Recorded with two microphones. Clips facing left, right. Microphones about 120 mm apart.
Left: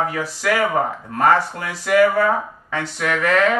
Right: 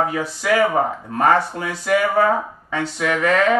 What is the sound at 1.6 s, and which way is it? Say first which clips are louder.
Speech: left 3 dB; 25° right (ahead or behind).